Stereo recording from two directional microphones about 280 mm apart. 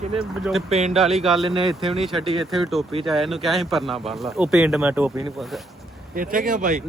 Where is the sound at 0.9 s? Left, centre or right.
Centre.